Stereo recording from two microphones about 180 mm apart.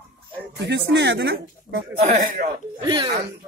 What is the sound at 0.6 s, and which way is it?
A man's voice, 70° right (ahead or behind).